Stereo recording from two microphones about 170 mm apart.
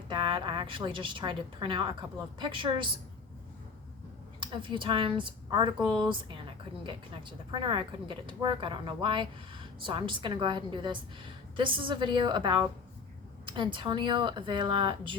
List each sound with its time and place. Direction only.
0.1 s speech: 30° right (ahead or behind)
4.4 s a woman's voice: 30° right (ahead or behind)